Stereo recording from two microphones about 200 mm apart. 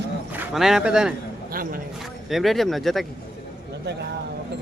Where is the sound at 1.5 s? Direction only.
45° right (ahead or behind).